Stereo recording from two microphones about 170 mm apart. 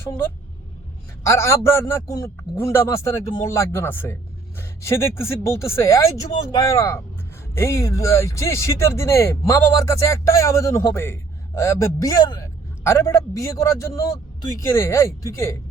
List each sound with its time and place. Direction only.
1.2 s speech: 15° left (ahead or behind)